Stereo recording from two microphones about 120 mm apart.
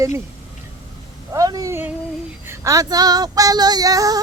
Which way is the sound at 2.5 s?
30° right (ahead or behind).